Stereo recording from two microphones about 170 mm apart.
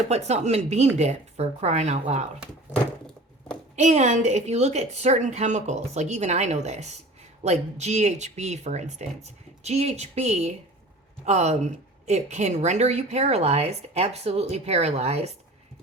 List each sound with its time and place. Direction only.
0.1 s a woman's voice: 40° right (ahead or behind)
3.8 s a woman's voice: 40° right (ahead or behind)